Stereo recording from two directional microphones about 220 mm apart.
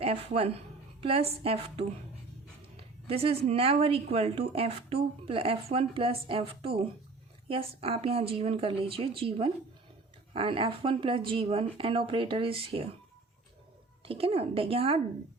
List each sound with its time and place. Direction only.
0.0 s speech: 25° right (ahead or behind)
14.0 s speech: 25° right (ahead or behind)